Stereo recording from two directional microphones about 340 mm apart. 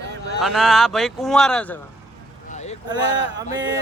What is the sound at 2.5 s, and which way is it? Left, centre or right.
Vehicle, centre.